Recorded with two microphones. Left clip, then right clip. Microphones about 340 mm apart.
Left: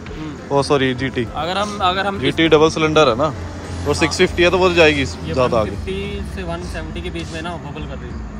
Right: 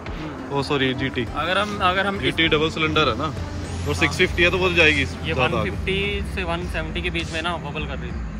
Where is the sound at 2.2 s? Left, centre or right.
Centre.